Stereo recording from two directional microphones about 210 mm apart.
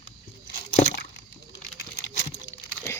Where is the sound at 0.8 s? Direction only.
50° left (ahead or behind).